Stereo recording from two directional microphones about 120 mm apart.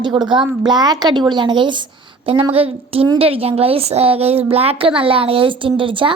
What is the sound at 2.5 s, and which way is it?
A woman's voice, 50° right (ahead or behind).